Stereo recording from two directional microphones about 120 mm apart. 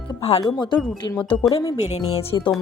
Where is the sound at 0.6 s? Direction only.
40° left (ahead or behind).